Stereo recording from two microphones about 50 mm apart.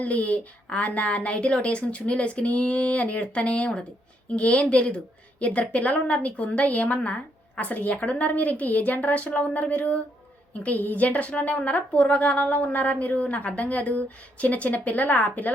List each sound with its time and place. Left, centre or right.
0.0 s a woman's voice: left